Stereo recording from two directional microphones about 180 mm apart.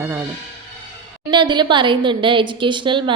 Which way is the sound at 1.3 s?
25° right (ahead or behind).